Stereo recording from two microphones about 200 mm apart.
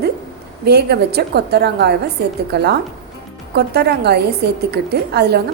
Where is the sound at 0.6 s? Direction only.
55° right (ahead or behind).